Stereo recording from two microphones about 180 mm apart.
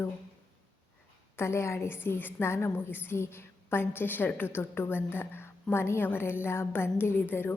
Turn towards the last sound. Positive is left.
turn(degrees=10)  # may be behind; listen again after turning